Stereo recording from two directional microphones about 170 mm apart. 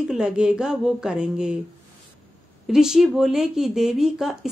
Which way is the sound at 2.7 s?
5° right (ahead or behind).